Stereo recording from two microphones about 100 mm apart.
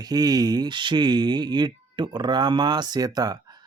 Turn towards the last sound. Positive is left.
turn(degrees=-40)  # may be behind; listen again after turning